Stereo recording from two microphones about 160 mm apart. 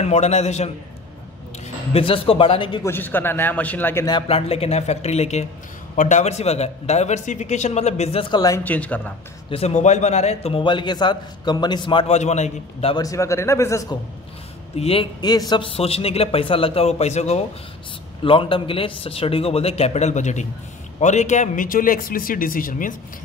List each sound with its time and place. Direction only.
0.0 s speech: 45° left (ahead or behind)
1.9 s a man's voice: 35° left (ahead or behind)
2.8 s a man's voice: 15° left (ahead or behind)
4.3 s a man's voice: 40° left (ahead or behind)
8.6 s a man's voice: 10° left (ahead or behind)
9.5 s a man's voice: 40° left (ahead or behind)
12.2 s speech: 45° left (ahead or behind)
12.9 s speech: 20° left (ahead or behind)
14.8 s a man's voice: 35° left (ahead or behind)
18.2 s a man's voice: 35° left (ahead or behind); by 22.9 s 60° left (ahead or behind)